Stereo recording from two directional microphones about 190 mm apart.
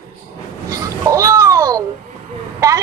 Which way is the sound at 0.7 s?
15° right (ahead or behind).